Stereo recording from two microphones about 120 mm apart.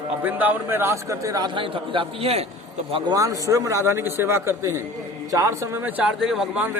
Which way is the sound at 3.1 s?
25° right (ahead or behind).